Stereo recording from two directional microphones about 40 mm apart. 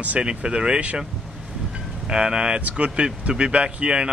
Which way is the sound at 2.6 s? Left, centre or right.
Right.